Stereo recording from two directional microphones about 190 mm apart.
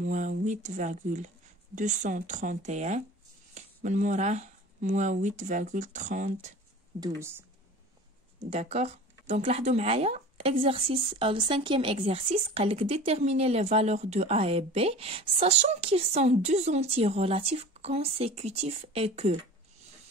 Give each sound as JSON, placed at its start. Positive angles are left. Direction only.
{"t": 0.0, "sound": "speech", "side_deg": -45}
{"t": 7.0, "sound": "speech", "side_deg": -15}
{"t": 8.5, "sound": "speech", "side_deg": -35}